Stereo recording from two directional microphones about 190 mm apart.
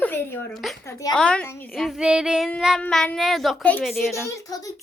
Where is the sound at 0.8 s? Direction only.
15° left (ahead or behind).